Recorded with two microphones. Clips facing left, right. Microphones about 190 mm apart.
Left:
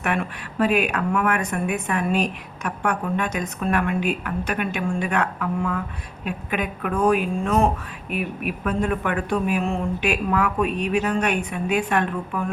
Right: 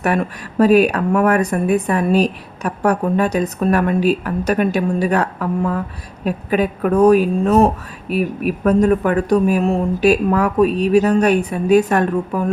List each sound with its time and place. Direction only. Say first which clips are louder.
0.0 s speech: right 7 dB; 40° right (ahead or behind)